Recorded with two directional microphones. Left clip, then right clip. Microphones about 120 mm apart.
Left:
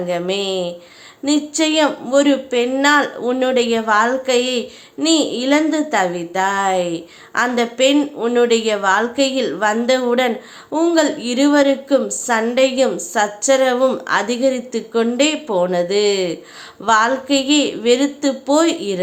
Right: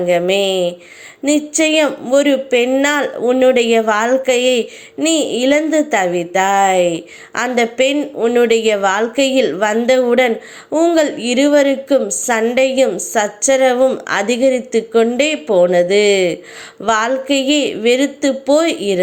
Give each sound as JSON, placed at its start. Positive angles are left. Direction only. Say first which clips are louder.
{"t": 0.1, "sound": "a woman's voice", "louder": "right 7 dB", "side_deg": -25}